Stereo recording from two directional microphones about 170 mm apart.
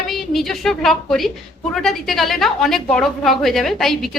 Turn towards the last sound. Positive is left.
turn(degrees=0)  # may be behind; listen again after turning